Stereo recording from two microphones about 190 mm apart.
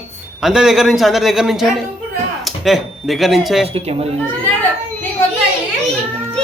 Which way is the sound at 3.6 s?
30° right (ahead or behind).